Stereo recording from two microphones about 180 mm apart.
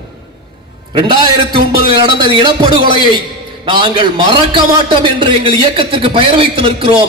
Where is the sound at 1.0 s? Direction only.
25° right (ahead or behind).